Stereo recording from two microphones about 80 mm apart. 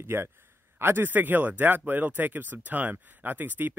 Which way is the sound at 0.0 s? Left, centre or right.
Right.